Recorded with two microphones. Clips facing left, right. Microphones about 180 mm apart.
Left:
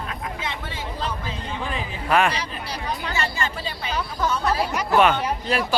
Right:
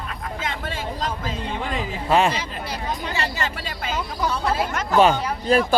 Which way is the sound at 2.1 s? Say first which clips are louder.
Right 1 dB; 25° right (ahead or behind).